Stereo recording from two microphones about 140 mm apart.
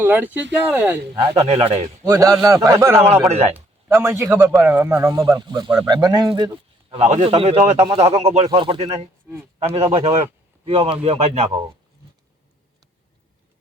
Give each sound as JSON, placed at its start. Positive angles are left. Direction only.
{"t": 0.0, "sound": "speech", "side_deg": -10}
{"t": 1.4, "sound": "a man's voice", "side_deg": -45}
{"t": 2.0, "sound": "a man's voice", "side_deg": -20}
{"t": 3.2, "sound": "a man's voice", "side_deg": -50}
{"t": 3.5, "sound": "speech", "side_deg": -15}
{"t": 5.5, "sound": "a man's voice", "side_deg": -30}
{"t": 6.9, "sound": "a man's voice", "side_deg": -45}